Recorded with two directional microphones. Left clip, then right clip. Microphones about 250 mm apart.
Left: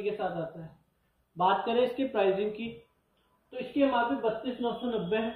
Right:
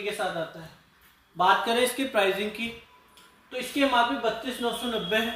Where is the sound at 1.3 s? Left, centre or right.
Right.